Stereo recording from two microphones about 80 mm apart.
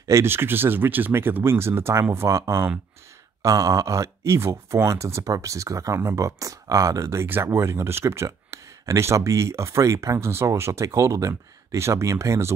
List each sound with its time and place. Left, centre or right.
0.0 s speech: right